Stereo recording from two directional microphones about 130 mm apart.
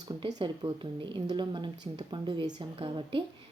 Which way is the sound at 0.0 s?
35° right (ahead or behind).